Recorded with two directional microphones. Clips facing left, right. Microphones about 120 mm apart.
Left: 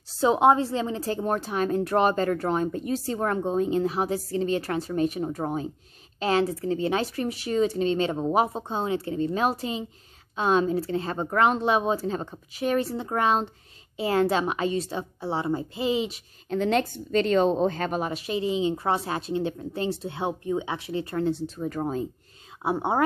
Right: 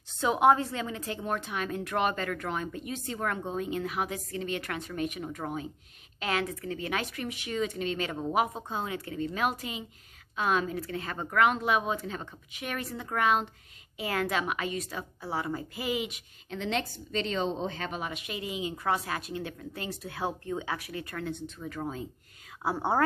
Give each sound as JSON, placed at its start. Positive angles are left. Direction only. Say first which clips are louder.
{"t": 0.1, "sound": "a woman's voice", "louder": "left 4 dB", "side_deg": 30}
{"t": 16.4, "sound": "speech", "louder": "left 8 dB", "side_deg": 45}
{"t": 22.6, "sound": "speech", "louder": "left 3 dB", "side_deg": 20}